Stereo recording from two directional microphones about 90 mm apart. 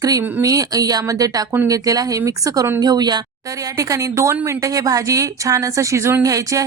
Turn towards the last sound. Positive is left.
turn(degrees=-40)  # may be behind; listen again after turning